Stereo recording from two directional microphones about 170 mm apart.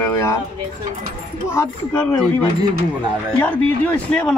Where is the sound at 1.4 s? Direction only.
15° left (ahead or behind).